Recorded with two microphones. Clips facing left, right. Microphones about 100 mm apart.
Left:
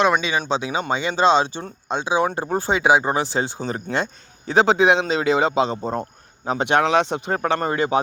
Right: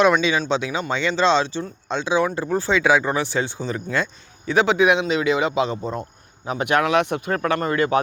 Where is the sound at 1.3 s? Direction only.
45° left (ahead or behind).